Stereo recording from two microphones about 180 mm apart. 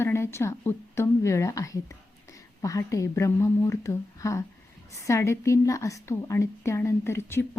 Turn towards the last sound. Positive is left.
turn(degrees=15)  # may be behind; listen again after turning